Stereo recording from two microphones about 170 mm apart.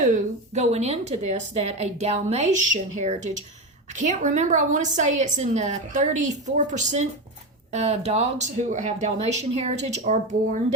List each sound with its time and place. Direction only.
0.0 s speech: 45° right (ahead or behind)
3.9 s a woman's voice: 45° right (ahead or behind)